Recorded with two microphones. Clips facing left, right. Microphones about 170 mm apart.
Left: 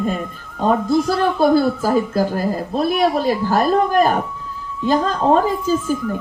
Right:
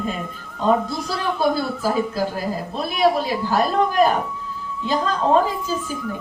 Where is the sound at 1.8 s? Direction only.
45° left (ahead or behind).